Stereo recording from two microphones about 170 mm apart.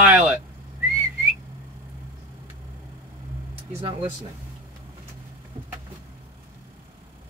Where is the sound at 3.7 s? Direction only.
35° right (ahead or behind).